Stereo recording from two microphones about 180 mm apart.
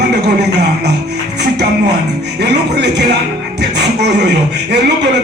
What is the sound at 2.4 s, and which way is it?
Speech, 70° right (ahead or behind).